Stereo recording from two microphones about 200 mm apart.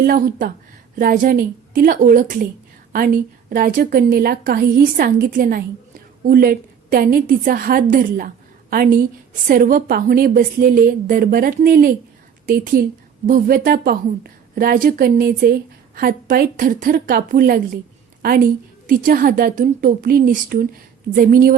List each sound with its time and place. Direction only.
0.0 s a woman's voice: 45° right (ahead or behind)